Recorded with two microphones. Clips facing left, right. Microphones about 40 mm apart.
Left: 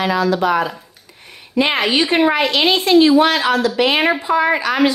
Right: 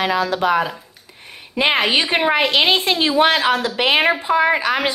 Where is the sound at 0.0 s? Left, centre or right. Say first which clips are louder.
Left 2 dB; right.